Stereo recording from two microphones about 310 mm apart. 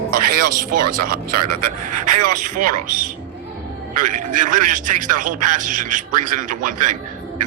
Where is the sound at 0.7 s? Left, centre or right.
Right.